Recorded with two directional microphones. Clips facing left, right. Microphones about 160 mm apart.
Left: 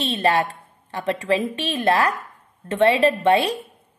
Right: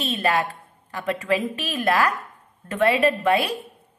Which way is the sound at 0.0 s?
30° left (ahead or behind).